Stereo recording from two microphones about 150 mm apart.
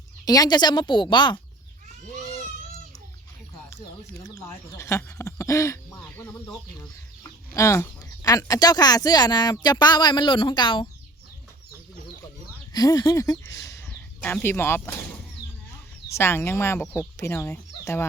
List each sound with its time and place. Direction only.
0.3 s a woman's voice: 25° left (ahead or behind)
4.2 s speech: 20° left (ahead or behind)
12.7 s speech: 25° left (ahead or behind)
16.0 s speech: 15° left (ahead or behind)